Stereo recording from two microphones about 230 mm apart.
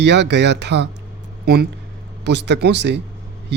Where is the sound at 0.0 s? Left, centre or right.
Right.